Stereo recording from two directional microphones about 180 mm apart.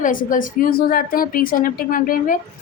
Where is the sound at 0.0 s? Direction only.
50° left (ahead or behind).